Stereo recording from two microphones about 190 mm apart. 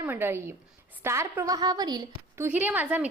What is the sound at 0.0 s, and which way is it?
A woman's voice, 10° right (ahead or behind).